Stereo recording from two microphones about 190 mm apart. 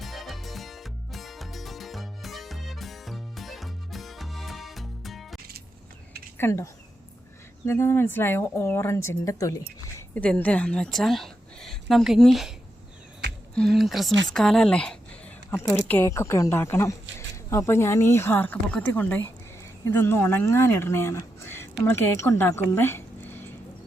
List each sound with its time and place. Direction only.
0.0 s music: centre (ahead or behind)
6.3 s a woman's voice: 15° left (ahead or behind)
22.7 s a sound: 10° left (ahead or behind)